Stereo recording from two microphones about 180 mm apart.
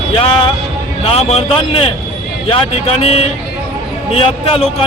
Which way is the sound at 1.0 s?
35° left (ahead or behind).